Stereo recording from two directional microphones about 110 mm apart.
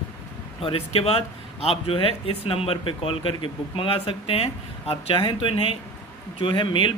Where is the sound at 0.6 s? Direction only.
60° left (ahead or behind).